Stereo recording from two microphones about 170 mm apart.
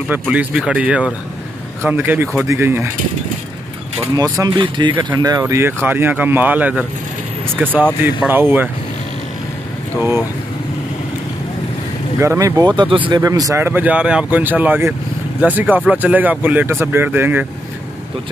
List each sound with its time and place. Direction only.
0.1 s speech: 10° right (ahead or behind)
4.1 s speech: 20° right (ahead or behind)
9.9 s speech: 15° right (ahead or behind)
12.2 s speech: 20° right (ahead or behind)